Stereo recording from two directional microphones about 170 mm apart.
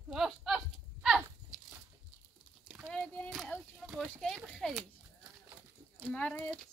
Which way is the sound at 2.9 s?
5° left (ahead or behind).